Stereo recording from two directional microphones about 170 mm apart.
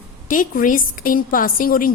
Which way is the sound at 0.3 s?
50° left (ahead or behind).